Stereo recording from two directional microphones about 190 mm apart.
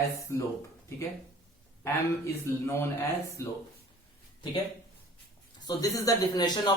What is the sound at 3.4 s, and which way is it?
Speech, 15° left (ahead or behind).